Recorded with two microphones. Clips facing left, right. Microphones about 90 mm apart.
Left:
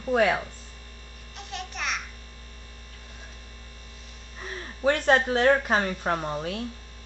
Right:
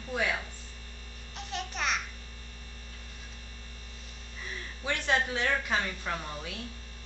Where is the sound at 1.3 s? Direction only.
Centre (ahead or behind).